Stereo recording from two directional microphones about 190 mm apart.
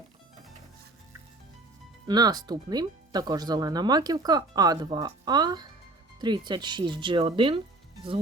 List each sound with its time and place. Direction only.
2.0 s speech: 20° right (ahead or behind)